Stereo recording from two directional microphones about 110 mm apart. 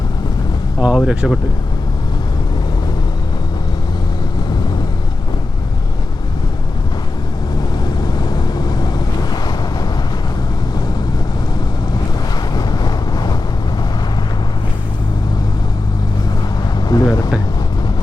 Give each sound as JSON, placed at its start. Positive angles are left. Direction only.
{"t": 0.8, "sound": "speech", "side_deg": -10}
{"t": 8.0, "sound": "wind noise", "side_deg": 40}
{"t": 12.5, "sound": "wind noise", "side_deg": 35}
{"t": 16.9, "sound": "a sound", "side_deg": 35}